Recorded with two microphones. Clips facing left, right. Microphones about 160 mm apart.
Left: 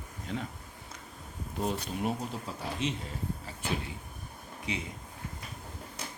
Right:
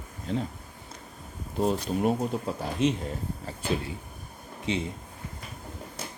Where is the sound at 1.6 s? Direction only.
35° right (ahead or behind).